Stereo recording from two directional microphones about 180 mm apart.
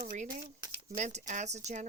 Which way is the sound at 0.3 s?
20° right (ahead or behind).